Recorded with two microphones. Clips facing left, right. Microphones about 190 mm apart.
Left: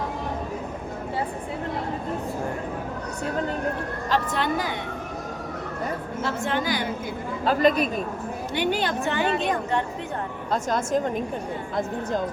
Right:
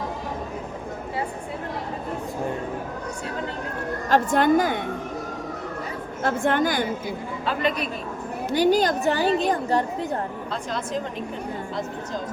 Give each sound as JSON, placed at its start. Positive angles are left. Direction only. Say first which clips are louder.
{"t": 4.1, "sound": "a woman's voice", "louder": "right 7 dB", "side_deg": -50}
{"t": 6.2, "sound": "a woman's voice", "louder": "right 5 dB", "side_deg": -50}
{"t": 7.4, "sound": "a woman's voice", "louder": "left 5 dB", "side_deg": 40}
{"t": 8.5, "sound": "a woman's voice", "louder": "right 6 dB", "side_deg": -40}
{"t": 10.5, "sound": "a woman's voice", "louder": "left 7 dB", "side_deg": 45}